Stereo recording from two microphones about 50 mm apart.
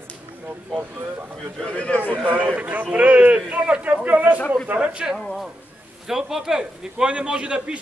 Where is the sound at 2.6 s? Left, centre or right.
Right.